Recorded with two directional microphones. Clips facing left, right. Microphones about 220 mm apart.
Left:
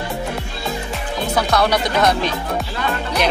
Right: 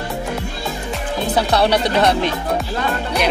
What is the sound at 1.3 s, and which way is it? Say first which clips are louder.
Speech: right 1 dB; 30° right (ahead or behind).